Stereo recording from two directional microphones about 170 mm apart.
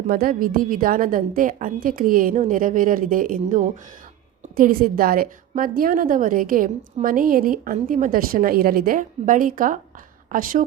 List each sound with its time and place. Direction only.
0.1 s a woman's voice: 60° right (ahead or behind)